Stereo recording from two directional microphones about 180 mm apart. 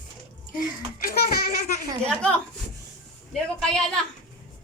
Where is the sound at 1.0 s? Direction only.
55° left (ahead or behind).